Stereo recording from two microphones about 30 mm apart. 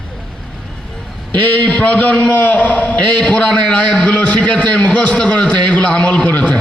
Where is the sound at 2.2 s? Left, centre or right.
Left.